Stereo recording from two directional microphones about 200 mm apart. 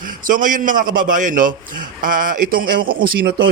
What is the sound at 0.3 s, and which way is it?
A man's voice, 40° right (ahead or behind).